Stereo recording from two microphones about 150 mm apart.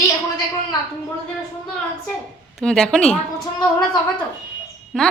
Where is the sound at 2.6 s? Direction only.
5° left (ahead or behind).